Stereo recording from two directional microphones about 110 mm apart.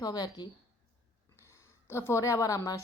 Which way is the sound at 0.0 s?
35° left (ahead or behind).